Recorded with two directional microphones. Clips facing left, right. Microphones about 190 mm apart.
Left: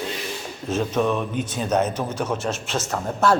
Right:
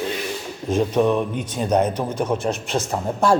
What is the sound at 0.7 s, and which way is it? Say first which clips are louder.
A man's voice: right 4 dB; 15° right (ahead or behind).